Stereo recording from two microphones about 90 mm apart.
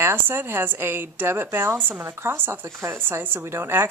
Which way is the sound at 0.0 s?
25° right (ahead or behind).